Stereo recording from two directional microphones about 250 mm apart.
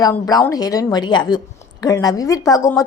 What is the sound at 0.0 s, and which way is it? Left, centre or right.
A woman's voice, centre.